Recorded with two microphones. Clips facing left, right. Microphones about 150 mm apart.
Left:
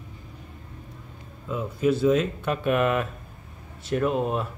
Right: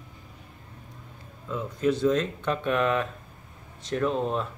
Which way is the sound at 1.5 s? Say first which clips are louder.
Left 2 dB; 10° left (ahead or behind).